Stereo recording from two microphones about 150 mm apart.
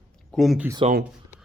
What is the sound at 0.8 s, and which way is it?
Speech, 40° right (ahead or behind).